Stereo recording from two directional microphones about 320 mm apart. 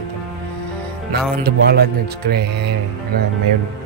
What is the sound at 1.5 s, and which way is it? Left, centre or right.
Speech, right.